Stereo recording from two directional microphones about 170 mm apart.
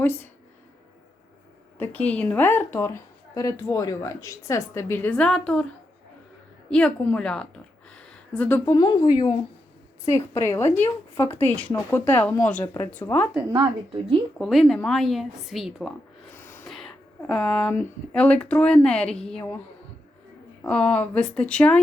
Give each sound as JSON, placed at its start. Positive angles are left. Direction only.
{"t": 0.0, "sound": "speech", "side_deg": 10}
{"t": 1.8, "sound": "a woman's voice", "side_deg": 10}
{"t": 6.7, "sound": "a woman's voice", "side_deg": 5}
{"t": 13.5, "sound": "speech", "side_deg": -30}
{"t": 14.3, "sound": "speech", "side_deg": 0}
{"t": 16.3, "sound": "a sound", "side_deg": 15}
{"t": 16.7, "sound": "speech", "side_deg": 0}
{"t": 20.7, "sound": "a woman's voice", "side_deg": 5}